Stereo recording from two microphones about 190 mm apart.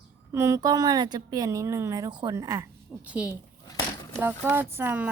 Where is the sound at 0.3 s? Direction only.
15° right (ahead or behind).